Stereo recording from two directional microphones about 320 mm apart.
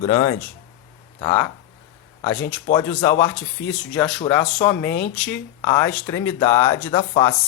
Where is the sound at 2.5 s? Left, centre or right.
Centre.